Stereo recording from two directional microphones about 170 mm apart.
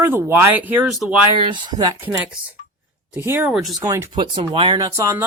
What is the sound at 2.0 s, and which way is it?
Speech, 10° right (ahead or behind).